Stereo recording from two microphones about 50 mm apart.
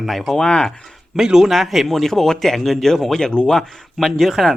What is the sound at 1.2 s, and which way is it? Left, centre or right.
Speech, centre.